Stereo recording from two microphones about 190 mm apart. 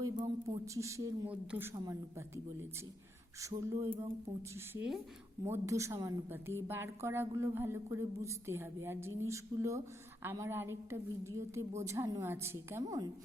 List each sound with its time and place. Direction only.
0.0 s a woman's voice: 20° right (ahead or behind)